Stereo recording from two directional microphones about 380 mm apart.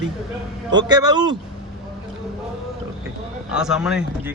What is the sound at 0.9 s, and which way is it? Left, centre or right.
Speech, centre.